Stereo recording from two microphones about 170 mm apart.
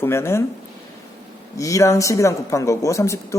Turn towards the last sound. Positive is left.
turn(degrees=15)  # may be behind; listen again after turning